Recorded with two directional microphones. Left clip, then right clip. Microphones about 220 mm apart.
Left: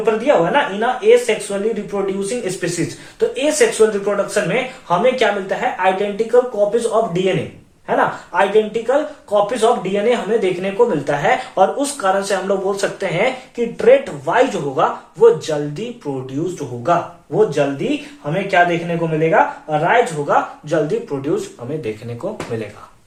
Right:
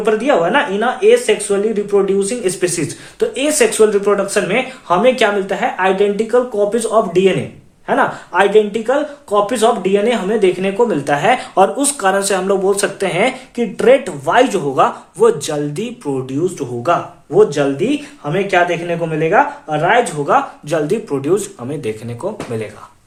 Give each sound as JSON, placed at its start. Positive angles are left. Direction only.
{"t": 0.0, "sound": "speech", "side_deg": -50}